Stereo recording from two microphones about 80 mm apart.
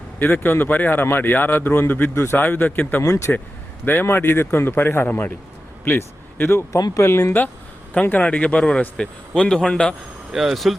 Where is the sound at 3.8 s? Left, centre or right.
Left.